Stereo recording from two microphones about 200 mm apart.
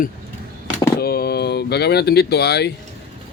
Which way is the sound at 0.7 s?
50° left (ahead or behind).